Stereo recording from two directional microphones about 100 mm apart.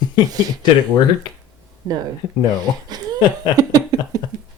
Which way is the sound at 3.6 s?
40° right (ahead or behind).